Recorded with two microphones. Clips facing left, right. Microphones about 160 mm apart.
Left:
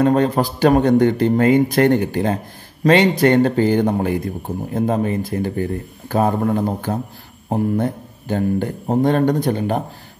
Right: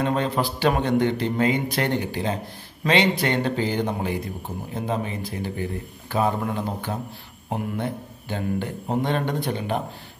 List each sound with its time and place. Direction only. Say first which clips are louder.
0.0 s speech: left 8 dB; 45° left (ahead or behind)